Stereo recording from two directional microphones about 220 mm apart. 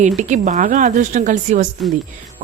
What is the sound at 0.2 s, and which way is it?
Speech, 35° right (ahead or behind).